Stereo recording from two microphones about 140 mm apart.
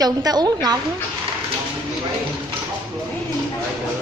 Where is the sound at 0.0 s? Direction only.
30° right (ahead or behind).